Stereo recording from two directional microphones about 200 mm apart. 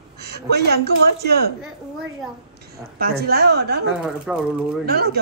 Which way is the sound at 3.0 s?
50° right (ahead or behind).